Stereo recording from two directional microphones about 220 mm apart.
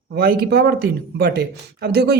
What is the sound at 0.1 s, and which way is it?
Speech, 45° right (ahead or behind).